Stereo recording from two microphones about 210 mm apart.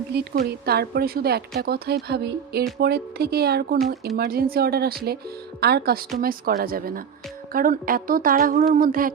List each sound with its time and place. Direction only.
0.3 s speech: 50° right (ahead or behind)